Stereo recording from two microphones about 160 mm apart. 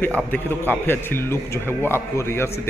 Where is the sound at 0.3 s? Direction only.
10° left (ahead or behind).